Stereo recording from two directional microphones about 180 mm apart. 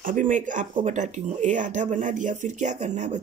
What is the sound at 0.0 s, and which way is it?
Speech, 45° right (ahead or behind).